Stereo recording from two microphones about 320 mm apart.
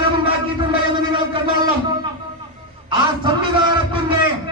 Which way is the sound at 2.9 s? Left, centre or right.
Centre.